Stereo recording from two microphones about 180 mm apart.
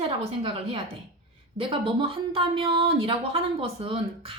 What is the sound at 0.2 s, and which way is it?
Speech, 30° right (ahead or behind).